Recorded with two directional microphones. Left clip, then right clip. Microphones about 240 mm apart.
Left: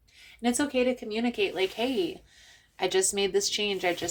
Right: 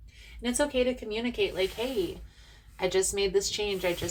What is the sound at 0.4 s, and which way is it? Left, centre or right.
A woman's voice, left.